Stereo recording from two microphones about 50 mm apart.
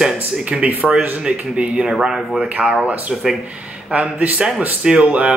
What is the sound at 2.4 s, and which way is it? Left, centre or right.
Speech, right.